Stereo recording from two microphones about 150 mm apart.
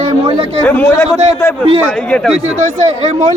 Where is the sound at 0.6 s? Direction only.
10° left (ahead or behind).